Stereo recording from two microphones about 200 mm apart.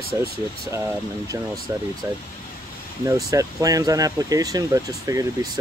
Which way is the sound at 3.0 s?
15° right (ahead or behind).